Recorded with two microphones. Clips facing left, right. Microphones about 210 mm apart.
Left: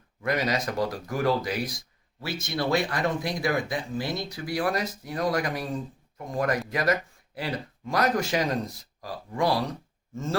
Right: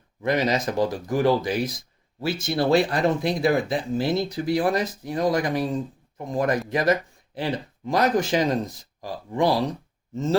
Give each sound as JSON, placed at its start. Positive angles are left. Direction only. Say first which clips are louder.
{"t": 0.2, "sound": "speech", "louder": "right 4 dB", "side_deg": -25}